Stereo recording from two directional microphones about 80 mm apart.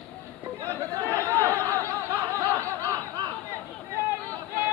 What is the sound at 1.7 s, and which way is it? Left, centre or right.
Snicker, right.